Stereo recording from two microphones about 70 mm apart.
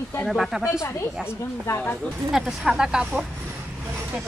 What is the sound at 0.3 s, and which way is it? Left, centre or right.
Speech, centre.